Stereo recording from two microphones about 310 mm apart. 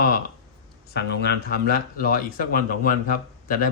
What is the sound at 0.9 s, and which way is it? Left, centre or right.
Speech, left.